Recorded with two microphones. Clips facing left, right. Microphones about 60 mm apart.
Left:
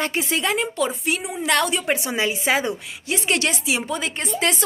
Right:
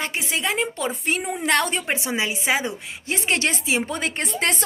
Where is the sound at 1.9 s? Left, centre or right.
Centre.